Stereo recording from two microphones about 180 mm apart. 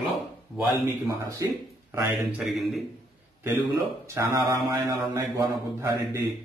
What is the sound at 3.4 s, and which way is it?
A man's voice, 15° right (ahead or behind).